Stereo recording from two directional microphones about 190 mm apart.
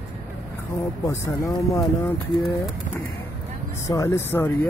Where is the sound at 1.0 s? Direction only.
15° left (ahead or behind).